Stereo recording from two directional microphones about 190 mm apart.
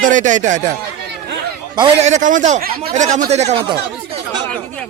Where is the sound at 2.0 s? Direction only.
40° right (ahead or behind).